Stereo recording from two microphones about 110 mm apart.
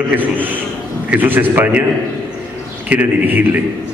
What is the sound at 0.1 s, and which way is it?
A man's voice, 15° right (ahead or behind).